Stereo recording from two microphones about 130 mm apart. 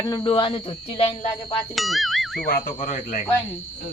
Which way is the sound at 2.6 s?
90° left.